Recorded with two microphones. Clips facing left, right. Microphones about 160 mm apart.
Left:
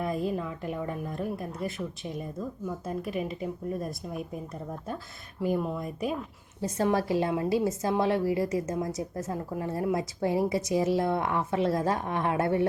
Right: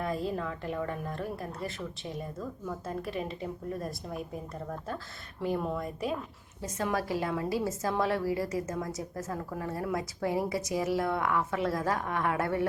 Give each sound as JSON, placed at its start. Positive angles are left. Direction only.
{"t": 0.0, "sound": "a woman's voice", "side_deg": 15}
{"t": 5.4, "sound": "a woman's voice", "side_deg": 10}
{"t": 6.6, "sound": "a woman's voice", "side_deg": 30}